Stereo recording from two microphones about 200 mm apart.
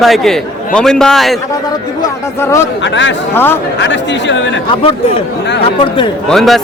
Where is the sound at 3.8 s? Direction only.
65° left (ahead or behind).